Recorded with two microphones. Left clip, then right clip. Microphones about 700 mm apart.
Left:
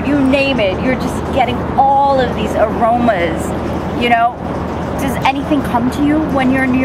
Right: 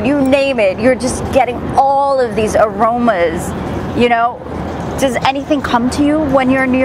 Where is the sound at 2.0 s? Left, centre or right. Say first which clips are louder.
Even; right.